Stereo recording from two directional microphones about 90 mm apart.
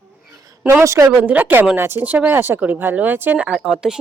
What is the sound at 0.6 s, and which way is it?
Speech, 25° right (ahead or behind).